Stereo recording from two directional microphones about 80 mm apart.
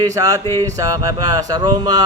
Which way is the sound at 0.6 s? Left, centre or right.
Right.